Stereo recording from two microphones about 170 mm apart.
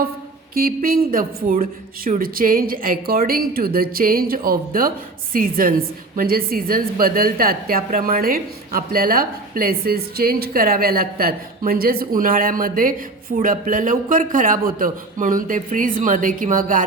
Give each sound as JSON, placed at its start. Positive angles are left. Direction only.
{"t": 0.5, "sound": "a woman's voice", "side_deg": -60}